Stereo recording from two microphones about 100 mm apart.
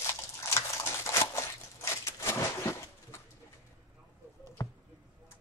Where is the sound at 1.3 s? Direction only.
30° left (ahead or behind).